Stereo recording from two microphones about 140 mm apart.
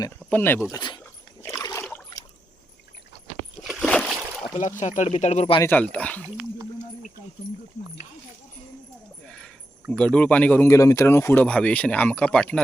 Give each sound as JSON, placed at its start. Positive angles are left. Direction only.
{"t": 0.3, "sound": "speech", "side_deg": 15}
{"t": 0.7, "sound": "speech", "side_deg": 30}
{"t": 1.4, "sound": "rowboat", "side_deg": 20}
{"t": 3.6, "sound": "a sound", "side_deg": 0}
{"t": 3.8, "sound": "boat", "side_deg": 5}
{"t": 4.5, "sound": "speech", "side_deg": 60}
{"t": 5.6, "sound": "speech", "side_deg": 10}
{"t": 9.2, "sound": "a sound", "side_deg": 5}
{"t": 9.9, "sound": "speech", "side_deg": 10}